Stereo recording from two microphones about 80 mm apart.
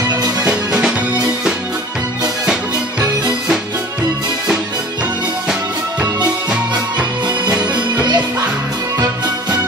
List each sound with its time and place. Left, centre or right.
0.1 s music: right
0.5 s music: centre
7.7 s music: right